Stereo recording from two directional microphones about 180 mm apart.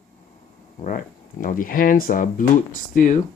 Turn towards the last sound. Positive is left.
turn(degrees=45)  # may be behind; listen again after turning